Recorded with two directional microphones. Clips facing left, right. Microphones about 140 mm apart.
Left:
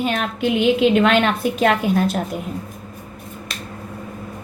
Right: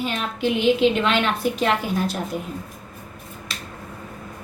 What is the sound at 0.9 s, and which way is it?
A woman's voice, 55° left (ahead or behind).